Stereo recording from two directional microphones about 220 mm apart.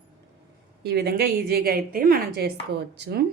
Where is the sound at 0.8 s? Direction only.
45° right (ahead or behind).